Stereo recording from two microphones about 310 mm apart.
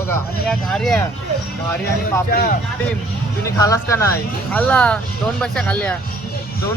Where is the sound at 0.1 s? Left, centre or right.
Centre.